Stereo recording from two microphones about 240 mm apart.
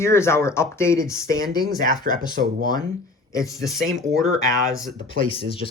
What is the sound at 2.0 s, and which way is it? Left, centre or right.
Speech, right.